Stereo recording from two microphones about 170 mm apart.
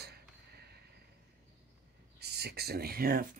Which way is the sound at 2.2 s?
70° right (ahead or behind).